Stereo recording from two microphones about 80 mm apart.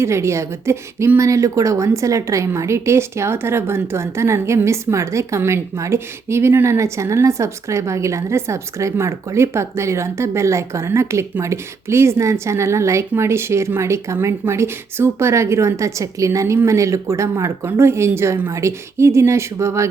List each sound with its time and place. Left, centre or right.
0.0 s a woman's voice: right